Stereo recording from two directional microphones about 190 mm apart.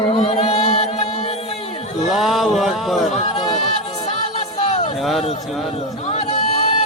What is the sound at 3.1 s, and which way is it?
Run, 35° left (ahead or behind).